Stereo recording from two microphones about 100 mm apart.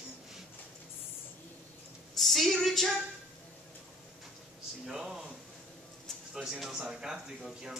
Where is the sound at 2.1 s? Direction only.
Centre (ahead or behind).